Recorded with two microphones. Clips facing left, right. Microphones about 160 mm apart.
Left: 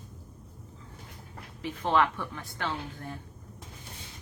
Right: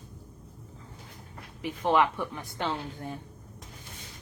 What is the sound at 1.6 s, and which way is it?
Speech, 15° right (ahead or behind).